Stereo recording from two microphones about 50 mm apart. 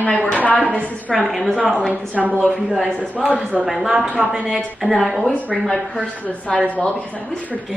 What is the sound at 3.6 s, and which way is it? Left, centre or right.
Speech, centre.